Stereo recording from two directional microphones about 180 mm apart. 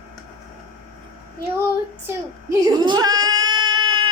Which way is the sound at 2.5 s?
20° right (ahead or behind).